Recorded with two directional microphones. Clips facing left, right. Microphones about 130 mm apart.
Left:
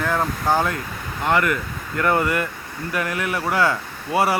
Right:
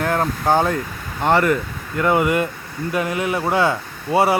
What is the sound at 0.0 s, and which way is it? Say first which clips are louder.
Speech: right 2 dB; 20° right (ahead or behind).